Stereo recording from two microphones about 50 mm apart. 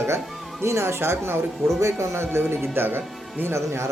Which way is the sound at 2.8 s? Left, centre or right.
Right.